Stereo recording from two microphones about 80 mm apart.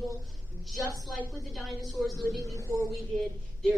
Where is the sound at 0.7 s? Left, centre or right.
Right.